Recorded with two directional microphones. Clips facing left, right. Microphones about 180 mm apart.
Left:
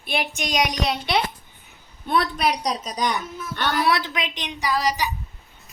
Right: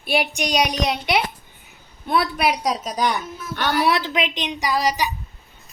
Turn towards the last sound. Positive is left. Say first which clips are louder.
# right 2 dB
turn(degrees=-15)  # may be behind; listen again after turning